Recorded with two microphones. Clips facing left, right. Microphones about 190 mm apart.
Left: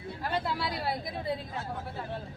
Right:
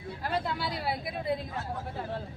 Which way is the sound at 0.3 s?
Centre (ahead or behind).